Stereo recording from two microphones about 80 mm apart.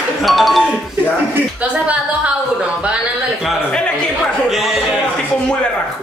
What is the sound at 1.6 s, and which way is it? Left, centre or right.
Speech, centre.